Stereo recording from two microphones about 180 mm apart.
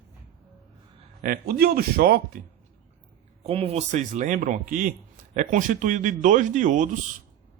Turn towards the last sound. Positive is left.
turn(degrees=-45)  # may be behind; listen again after turning